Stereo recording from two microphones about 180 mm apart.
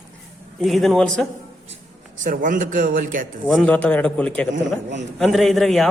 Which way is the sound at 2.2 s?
45° right (ahead or behind).